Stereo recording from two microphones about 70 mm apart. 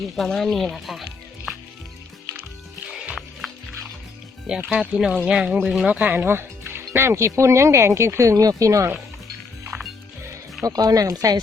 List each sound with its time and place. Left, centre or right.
0.2 s speech: centre
2.8 s music: centre
4.4 s speech: centre
6.2 s speech: right
10.6 s speech: right